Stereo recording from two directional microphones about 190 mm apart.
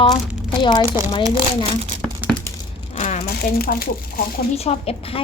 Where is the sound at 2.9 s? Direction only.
35° left (ahead or behind).